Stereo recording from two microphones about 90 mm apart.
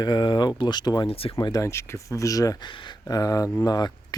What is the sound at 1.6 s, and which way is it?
Speech, 30° left (ahead or behind).